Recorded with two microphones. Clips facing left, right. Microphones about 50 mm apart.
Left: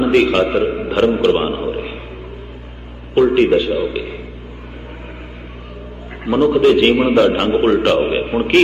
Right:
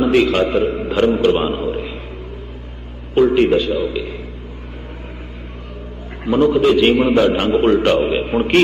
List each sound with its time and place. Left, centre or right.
0.0 s a man's voice: centre
1.5 s a sound: centre
3.2 s a man's voice: centre
6.2 s a man's voice: centre